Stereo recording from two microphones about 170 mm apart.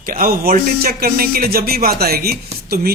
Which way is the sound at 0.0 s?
55° right (ahead or behind).